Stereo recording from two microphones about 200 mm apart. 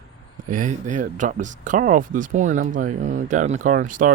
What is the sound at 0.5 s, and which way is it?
Speech, 40° right (ahead or behind).